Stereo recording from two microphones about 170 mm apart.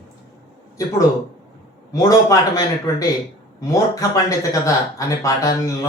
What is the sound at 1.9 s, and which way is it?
Speech, 20° left (ahead or behind).